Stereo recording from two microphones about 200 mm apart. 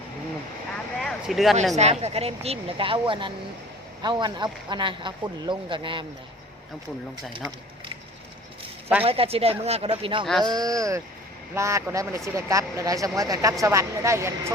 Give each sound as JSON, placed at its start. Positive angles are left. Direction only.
{"t": 0.9, "sound": "speech", "side_deg": 0}
{"t": 1.7, "sound": "speech", "side_deg": -35}
{"t": 9.0, "sound": "speech", "side_deg": -30}